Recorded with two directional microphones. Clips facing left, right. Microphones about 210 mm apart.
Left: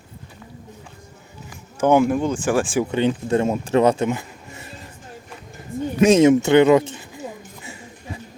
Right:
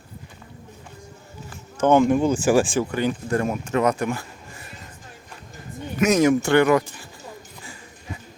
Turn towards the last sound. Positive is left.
turn(degrees=20)  # may be behind; listen again after turning